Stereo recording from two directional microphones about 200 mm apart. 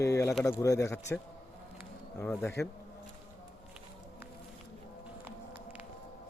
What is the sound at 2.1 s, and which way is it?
Bee, 10° left (ahead or behind).